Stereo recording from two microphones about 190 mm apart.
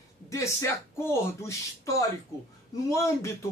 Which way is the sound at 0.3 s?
15° left (ahead or behind).